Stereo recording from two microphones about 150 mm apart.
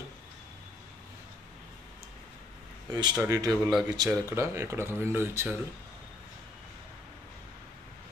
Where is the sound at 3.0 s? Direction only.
25° right (ahead or behind).